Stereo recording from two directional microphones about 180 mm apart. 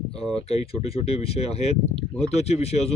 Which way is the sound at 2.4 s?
35° left (ahead or behind).